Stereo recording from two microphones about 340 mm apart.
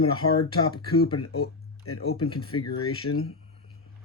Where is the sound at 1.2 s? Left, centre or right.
Left.